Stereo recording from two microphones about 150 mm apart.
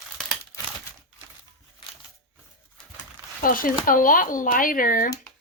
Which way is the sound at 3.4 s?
70° left (ahead or behind).